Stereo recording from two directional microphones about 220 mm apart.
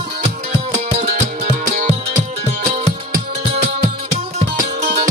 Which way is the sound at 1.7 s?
30° right (ahead or behind).